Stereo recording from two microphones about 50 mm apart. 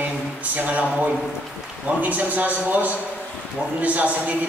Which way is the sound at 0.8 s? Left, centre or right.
Right.